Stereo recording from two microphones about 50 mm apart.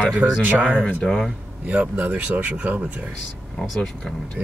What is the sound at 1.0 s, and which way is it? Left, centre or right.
Speech, centre.